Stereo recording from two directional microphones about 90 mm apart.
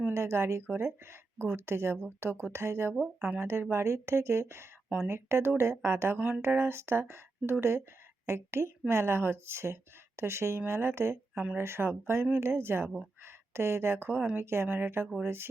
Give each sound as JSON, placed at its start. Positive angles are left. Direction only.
{"t": 0.0, "sound": "speech", "side_deg": -30}
{"t": 3.2, "sound": "speech", "side_deg": -5}
{"t": 3.4, "sound": "speech", "side_deg": -25}